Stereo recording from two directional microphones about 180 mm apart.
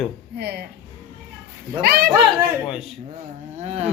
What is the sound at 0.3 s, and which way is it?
Speech, 60° right (ahead or behind).